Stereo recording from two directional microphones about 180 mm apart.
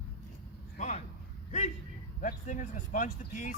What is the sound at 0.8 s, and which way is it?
Speech, 40° left (ahead or behind).